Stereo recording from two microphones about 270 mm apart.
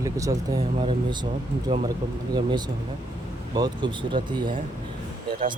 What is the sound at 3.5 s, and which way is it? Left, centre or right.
Speech, centre.